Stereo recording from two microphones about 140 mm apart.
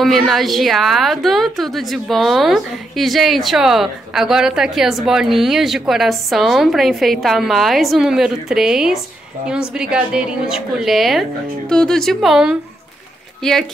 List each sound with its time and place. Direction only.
0.0 s a woman's voice: centre (ahead or behind)